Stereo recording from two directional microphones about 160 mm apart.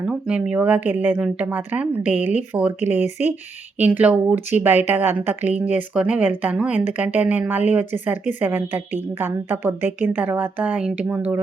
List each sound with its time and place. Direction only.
0.0 s a woman's voice: 10° right (ahead or behind)
2.8 s speech: 45° left (ahead or behind)
3.8 s a woman's voice: 10° right (ahead or behind)